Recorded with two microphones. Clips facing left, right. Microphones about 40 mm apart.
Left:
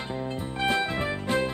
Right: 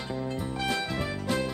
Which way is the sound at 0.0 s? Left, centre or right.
Left.